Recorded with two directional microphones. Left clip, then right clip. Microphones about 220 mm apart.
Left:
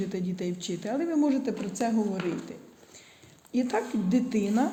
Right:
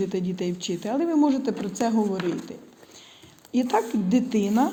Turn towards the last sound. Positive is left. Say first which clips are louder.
# right 4 dB
turn(degrees=-10)  # may be behind; listen again after turning